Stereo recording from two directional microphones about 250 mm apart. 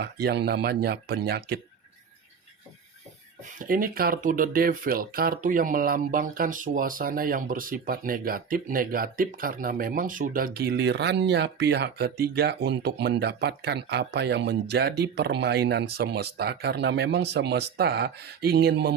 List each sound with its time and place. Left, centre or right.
0.0 s speech: right
3.6 s speech: right